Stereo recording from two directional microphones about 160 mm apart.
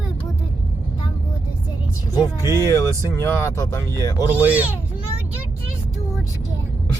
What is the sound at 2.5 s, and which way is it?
Speech, 20° left (ahead or behind).